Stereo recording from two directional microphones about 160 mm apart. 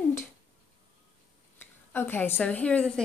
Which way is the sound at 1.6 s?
15° left (ahead or behind).